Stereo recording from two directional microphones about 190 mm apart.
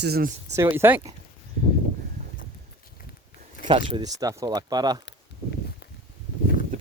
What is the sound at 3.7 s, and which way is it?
Speech, 25° right (ahead or behind).